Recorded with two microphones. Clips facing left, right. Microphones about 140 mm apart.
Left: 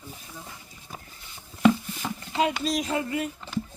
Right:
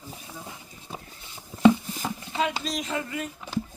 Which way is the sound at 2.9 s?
35° left (ahead or behind).